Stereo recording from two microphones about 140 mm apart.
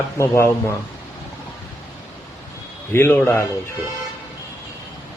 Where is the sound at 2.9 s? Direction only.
15° left (ahead or behind).